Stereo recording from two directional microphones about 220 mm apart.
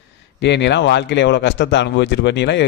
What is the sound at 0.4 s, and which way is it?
Speech, 50° left (ahead or behind).